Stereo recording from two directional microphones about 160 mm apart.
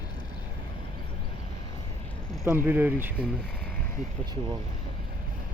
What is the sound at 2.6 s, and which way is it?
Speech, 10° right (ahead or behind).